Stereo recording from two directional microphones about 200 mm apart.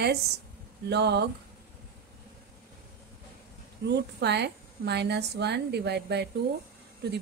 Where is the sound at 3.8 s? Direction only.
60° right (ahead or behind).